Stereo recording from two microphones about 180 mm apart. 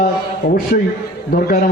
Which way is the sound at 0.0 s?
55° left (ahead or behind).